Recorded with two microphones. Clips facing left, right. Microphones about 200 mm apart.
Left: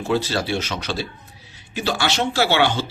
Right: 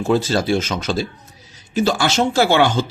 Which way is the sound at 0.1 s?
45° right (ahead or behind).